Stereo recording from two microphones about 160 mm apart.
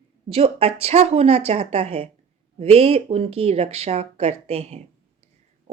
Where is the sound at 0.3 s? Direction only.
35° right (ahead or behind).